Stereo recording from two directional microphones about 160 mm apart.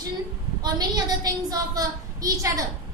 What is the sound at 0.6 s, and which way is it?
A woman's voice, 25° right (ahead or behind).